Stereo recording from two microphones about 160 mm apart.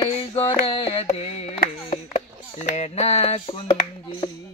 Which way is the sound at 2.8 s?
40° left (ahead or behind).